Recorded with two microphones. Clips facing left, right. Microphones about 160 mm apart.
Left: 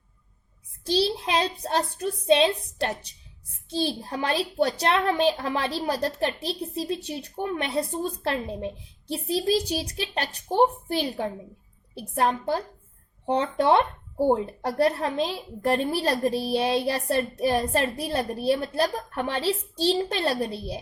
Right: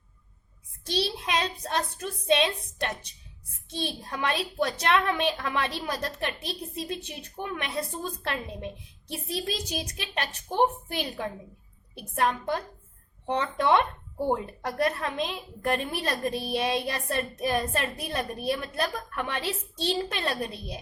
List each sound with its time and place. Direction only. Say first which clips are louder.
0.9 s a child's voice: left 5 dB; 30° left (ahead or behind)